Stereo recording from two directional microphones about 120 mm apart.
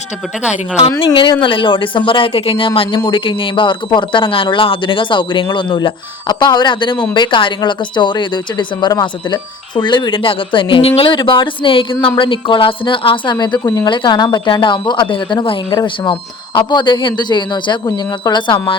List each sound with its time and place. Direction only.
1.0 s speech: 45° left (ahead or behind)